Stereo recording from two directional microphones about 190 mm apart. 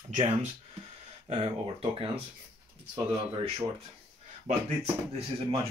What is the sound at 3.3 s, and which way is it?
Speech, 25° right (ahead or behind).